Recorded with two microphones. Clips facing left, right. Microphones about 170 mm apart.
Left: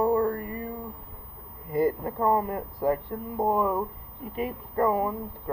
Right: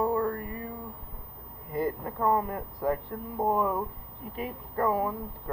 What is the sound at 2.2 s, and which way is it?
A woman's voice, 5° left (ahead or behind).